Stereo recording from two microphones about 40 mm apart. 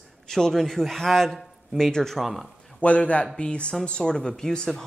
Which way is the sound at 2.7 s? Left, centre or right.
Left.